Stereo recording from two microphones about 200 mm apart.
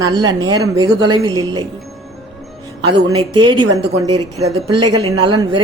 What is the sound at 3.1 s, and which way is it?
Speech, 25° right (ahead or behind).